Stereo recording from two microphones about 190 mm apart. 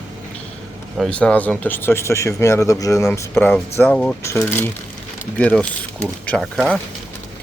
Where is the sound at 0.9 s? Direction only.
5° left (ahead or behind).